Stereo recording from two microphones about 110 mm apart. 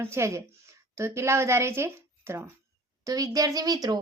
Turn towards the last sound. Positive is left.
turn(degrees=-35)  # may be behind; listen again after turning